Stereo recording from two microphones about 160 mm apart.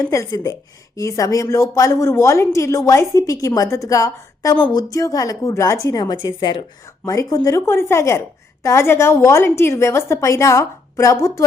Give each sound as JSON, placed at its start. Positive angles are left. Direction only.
{"t": 0.0, "sound": "speech", "side_deg": 20}
{"t": 6.8, "sound": "a woman's voice", "side_deg": 20}